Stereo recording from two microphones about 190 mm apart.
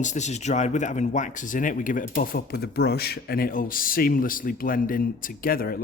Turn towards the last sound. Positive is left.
turn(degrees=50)  # may be behind; listen again after turning